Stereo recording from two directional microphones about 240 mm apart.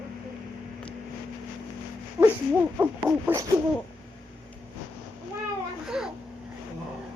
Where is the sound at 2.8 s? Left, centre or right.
Centre.